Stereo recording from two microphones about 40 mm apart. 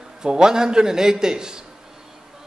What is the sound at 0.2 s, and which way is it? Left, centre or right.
A man's voice, centre.